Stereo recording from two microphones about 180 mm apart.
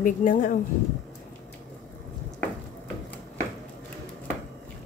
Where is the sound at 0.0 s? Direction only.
50° left (ahead or behind).